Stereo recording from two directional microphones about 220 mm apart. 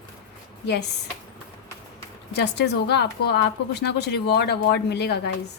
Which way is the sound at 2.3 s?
50° left (ahead or behind).